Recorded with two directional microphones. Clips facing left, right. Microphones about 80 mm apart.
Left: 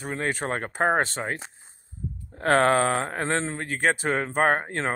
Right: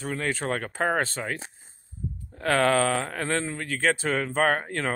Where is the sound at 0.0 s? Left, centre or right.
Left.